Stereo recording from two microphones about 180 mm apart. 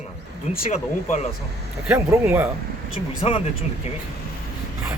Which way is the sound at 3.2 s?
30° left (ahead or behind).